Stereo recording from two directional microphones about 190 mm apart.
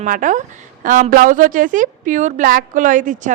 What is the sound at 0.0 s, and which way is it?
A woman's voice, 40° right (ahead or behind).